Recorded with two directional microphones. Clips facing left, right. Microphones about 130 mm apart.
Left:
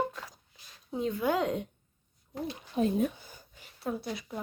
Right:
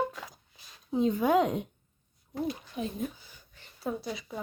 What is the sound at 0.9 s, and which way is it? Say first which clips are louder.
Speech: right 4 dB; 25° right (ahead or behind).